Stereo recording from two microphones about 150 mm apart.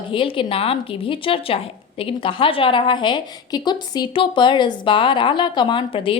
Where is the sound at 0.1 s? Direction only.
35° left (ahead or behind).